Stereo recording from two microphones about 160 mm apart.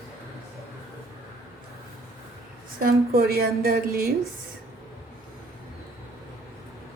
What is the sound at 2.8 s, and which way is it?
A woman's voice, 70° right (ahead or behind).